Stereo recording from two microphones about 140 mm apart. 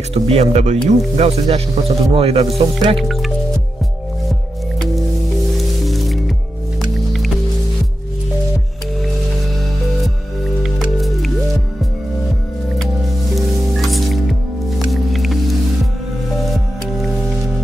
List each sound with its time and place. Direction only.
0.1 s speech: 45° right (ahead or behind)
3.0 s music: centre (ahead or behind)
4.7 s music: centre (ahead or behind)
10.6 s music: centre (ahead or behind)
12.7 s music: centre (ahead or behind)